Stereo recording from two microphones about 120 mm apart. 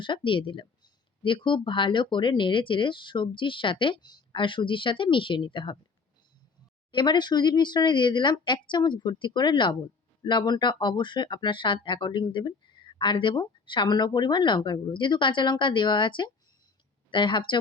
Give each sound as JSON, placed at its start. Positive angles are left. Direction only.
{"t": 0.0, "sound": "speech", "side_deg": 45}
{"t": 6.9, "sound": "speech", "side_deg": 40}